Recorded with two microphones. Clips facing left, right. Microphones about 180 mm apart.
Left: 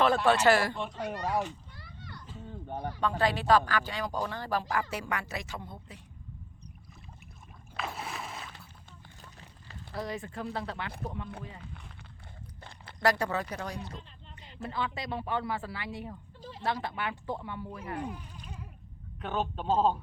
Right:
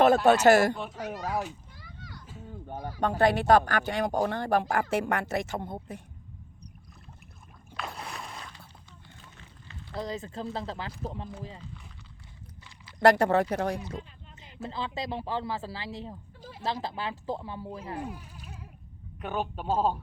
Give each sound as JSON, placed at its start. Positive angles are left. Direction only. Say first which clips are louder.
{"t": 0.4, "sound": "speech", "louder": "right 5 dB", "side_deg": -45}
{"t": 0.8, "sound": "children playing", "louder": "even", "side_deg": -5}
{"t": 3.0, "sound": "speech", "louder": "right 5 dB", "side_deg": -50}
{"t": 7.8, "sound": "boat", "louder": "left 1 dB", "side_deg": 0}
{"t": 9.9, "sound": "speech", "louder": "right 2 dB", "side_deg": -20}
{"t": 13.0, "sound": "speech", "louder": "right 7 dB", "side_deg": -55}
{"t": 14.4, "sound": "speech", "louder": "left 1 dB", "side_deg": -25}
{"t": 17.9, "sound": "a man's voice", "louder": "even", "side_deg": -5}